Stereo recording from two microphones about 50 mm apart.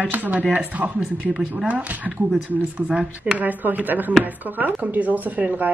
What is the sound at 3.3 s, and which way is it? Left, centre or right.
Speech, right.